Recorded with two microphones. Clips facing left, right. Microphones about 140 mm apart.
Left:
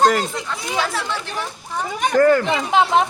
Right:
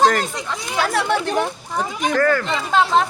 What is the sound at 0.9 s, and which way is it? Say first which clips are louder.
Speech: right 7 dB; 55° right (ahead or behind).